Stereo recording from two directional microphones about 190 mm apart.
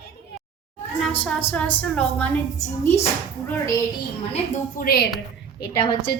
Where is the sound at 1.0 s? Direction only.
5° left (ahead or behind).